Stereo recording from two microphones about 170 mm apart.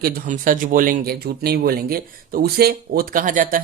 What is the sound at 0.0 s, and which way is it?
Speech, 50° right (ahead or behind).